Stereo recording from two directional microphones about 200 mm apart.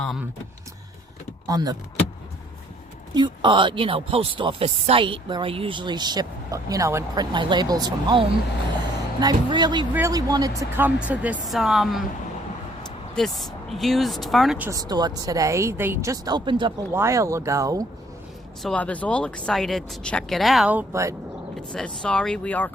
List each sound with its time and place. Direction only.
0.0 s speech: centre (ahead or behind)
1.5 s speech: 20° right (ahead or behind)
3.2 s speech: 25° right (ahead or behind); by 12.0 s centre (ahead or behind)
13.1 s speech: centre (ahead or behind)
14.7 s speech: 20° right (ahead or behind)
18.6 s speech: 5° left (ahead or behind); by 21.2 s 15° right (ahead or behind)
21.5 s speech: 5° left (ahead or behind)